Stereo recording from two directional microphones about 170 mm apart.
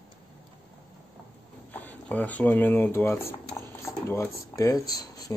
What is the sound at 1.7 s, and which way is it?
Speech, 10° left (ahead or behind).